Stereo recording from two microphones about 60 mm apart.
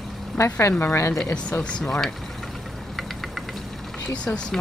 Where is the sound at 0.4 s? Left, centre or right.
Left.